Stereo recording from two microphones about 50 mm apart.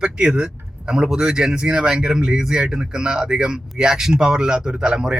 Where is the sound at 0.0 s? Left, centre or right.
Centre.